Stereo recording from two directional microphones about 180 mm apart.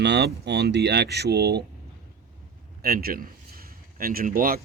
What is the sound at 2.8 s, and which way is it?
A man's voice, 60° right (ahead or behind).